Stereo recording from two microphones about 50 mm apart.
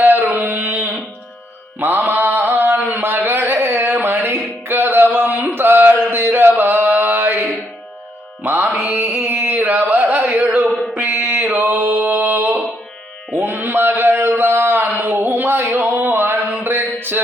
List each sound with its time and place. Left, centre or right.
0.0 s a sound: right
1.8 s mantra: right
3.0 s a sound: right
6.1 s mantra: right
8.4 s music: right
8.8 s carnatic music: right
9.2 s a sound: right
10.7 s music: centre
10.9 s mantra: right
11.9 s mantra: right
13.4 s a sound: right
16.6 s mantra: right